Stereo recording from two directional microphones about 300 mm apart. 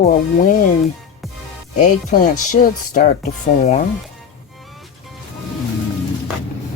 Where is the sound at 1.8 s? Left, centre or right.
Left.